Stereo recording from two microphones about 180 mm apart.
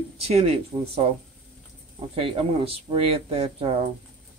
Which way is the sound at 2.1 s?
30° right (ahead or behind).